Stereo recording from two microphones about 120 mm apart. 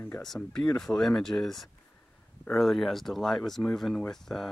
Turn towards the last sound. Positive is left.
turn(degrees=5)  # may be behind; listen again after turning